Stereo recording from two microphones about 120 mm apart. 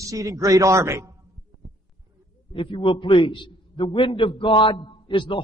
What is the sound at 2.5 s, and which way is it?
A man's voice, 45° left (ahead or behind).